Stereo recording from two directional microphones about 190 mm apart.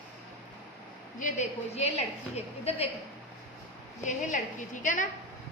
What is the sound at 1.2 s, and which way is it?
A woman's voice, 35° left (ahead or behind).